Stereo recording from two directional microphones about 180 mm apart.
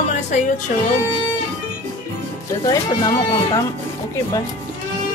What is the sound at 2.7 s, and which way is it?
Speech, 25° left (ahead or behind).